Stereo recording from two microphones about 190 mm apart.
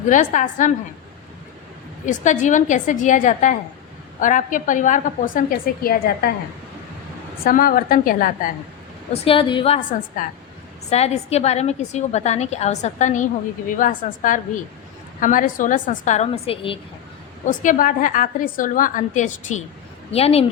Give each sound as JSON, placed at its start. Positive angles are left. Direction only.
{"t": 0.1, "sound": "a woman's voice", "side_deg": 40}
{"t": 2.0, "sound": "a woman's voice", "side_deg": 40}
{"t": 7.3, "sound": "a woman's voice", "side_deg": 50}
{"t": 9.2, "sound": "a woman's voice", "side_deg": 30}
{"t": 10.2, "sound": "a woman's voice", "side_deg": 45}
{"t": 17.4, "sound": "a woman's voice", "side_deg": 45}